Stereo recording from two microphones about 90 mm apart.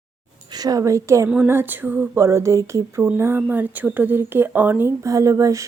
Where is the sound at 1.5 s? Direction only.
25° right (ahead or behind).